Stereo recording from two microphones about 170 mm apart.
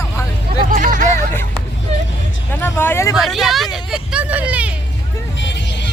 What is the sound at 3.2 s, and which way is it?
Speech, centre (ahead or behind).